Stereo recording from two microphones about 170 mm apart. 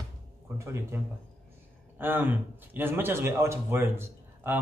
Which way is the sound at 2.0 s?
10° right (ahead or behind).